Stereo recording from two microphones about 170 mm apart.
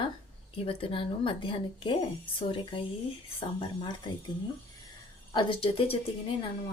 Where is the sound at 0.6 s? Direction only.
35° left (ahead or behind).